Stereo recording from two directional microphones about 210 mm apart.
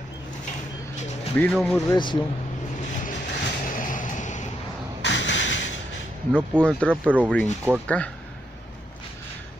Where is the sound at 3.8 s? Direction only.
40° left (ahead or behind).